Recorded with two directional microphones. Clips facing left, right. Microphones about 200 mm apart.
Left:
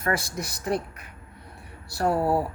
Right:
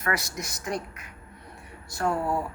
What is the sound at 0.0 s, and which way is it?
Speech, 30° left (ahead or behind).